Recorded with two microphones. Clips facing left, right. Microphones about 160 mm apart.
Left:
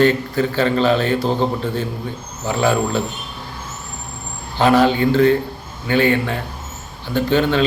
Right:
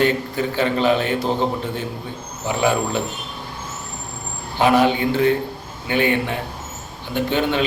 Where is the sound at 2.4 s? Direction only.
20° right (ahead or behind).